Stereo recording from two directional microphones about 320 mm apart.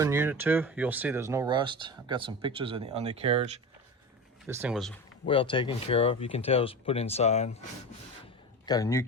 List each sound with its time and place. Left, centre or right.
0.0 s speech: centre
4.4 s speech: centre
5.2 s speech: centre
8.6 s speech: centre